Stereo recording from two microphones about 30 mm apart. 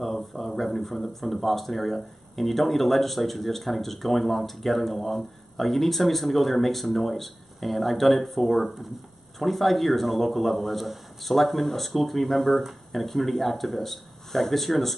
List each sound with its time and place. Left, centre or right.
0.0 s speech: centre